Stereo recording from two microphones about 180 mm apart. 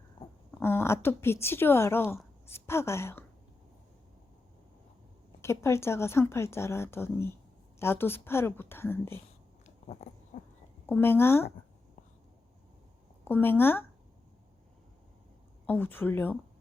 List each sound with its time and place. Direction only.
0.2 s dog: 30° left (ahead or behind)
0.6 s speech: 15° left (ahead or behind)
5.4 s a woman's voice: 15° left (ahead or behind)
9.6 s cat: 35° left (ahead or behind)
10.8 s a woman's voice: 10° left (ahead or behind)
13.2 s a woman's voice: 10° left (ahead or behind)
15.6 s a woman's voice: 10° left (ahead or behind)